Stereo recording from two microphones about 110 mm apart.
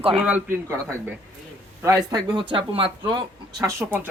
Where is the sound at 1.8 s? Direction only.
35° right (ahead or behind).